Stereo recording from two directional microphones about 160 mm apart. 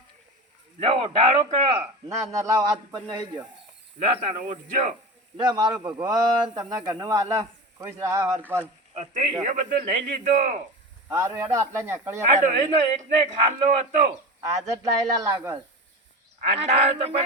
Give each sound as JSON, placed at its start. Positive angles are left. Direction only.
{"t": 0.8, "sound": "speech", "side_deg": -35}
{"t": 2.1, "sound": "speech", "side_deg": -20}
{"t": 4.0, "sound": "speech", "side_deg": -50}
{"t": 5.4, "sound": "speech", "side_deg": -25}
{"t": 9.0, "sound": "speech", "side_deg": -40}
{"t": 9.4, "sound": "speech", "side_deg": -50}
{"t": 11.1, "sound": "speech", "side_deg": -20}
{"t": 12.6, "sound": "speech", "side_deg": -45}
{"t": 14.4, "sound": "speech", "side_deg": -20}
{"t": 16.5, "sound": "speech", "side_deg": -40}